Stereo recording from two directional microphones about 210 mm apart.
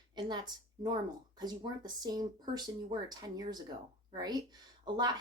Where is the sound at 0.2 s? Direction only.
20° right (ahead or behind).